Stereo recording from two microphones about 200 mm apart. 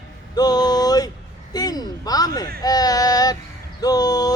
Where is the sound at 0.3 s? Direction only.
20° left (ahead or behind).